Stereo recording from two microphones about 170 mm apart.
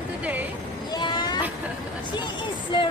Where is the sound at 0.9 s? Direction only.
25° left (ahead or behind).